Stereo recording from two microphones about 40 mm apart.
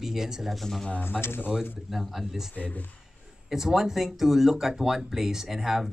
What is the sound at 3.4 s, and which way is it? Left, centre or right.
Speech, centre.